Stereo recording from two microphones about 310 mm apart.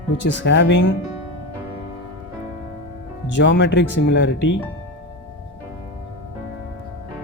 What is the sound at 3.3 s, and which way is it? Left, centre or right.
Speech, left.